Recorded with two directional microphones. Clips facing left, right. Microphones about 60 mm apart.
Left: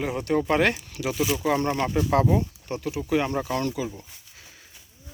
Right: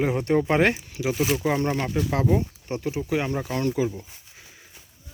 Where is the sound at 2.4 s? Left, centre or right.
Right.